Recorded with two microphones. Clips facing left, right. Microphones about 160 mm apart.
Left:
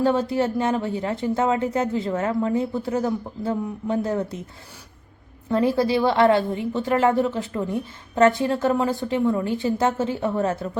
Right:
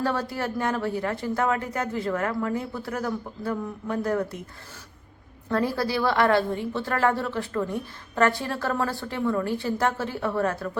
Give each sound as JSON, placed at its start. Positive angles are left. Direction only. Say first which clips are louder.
{"t": 0.0, "sound": "a woman's voice", "louder": "left 7 dB", "side_deg": 20}
{"t": 5.5, "sound": "a woman's voice", "louder": "left 5 dB", "side_deg": 20}